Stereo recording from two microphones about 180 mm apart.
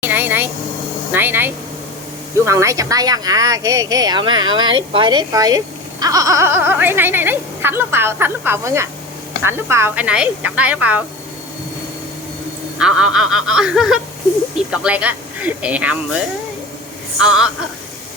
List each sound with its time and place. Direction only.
0.0 s air conditioning: 10° right (ahead or behind)
1.1 s speech: 10° right (ahead or behind)
12.8 s speech: 5° right (ahead or behind)